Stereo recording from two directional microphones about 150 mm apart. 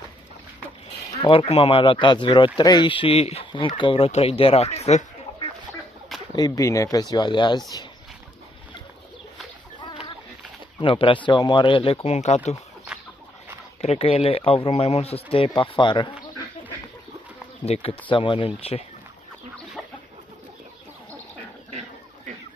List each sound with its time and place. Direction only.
1.2 s speech: 40° left (ahead or behind)
6.3 s speech: 25° left (ahead or behind)
10.8 s speech: 35° left (ahead or behind)
13.7 s speech: 45° left (ahead or behind)
18.1 s speech: 35° left (ahead or behind)